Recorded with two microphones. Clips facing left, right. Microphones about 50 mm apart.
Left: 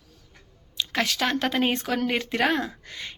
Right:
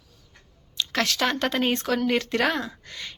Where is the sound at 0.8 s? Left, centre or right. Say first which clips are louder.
Right 1 dB; centre.